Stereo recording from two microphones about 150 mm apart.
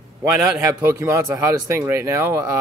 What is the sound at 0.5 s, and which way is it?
Speech, 15° right (ahead or behind).